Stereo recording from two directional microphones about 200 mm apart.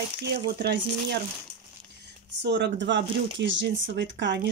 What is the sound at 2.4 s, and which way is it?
Speech, 60° right (ahead or behind).